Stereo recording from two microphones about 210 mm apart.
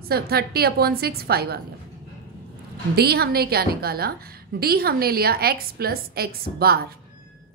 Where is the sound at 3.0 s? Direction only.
50° right (ahead or behind).